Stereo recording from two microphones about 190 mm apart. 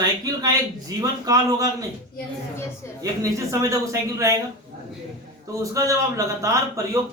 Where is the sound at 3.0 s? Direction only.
15° right (ahead or behind).